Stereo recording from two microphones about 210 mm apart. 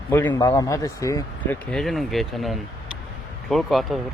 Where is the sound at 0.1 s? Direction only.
10° left (ahead or behind).